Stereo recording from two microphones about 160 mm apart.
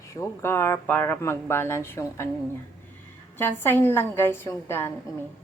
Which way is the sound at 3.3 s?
15° left (ahead or behind).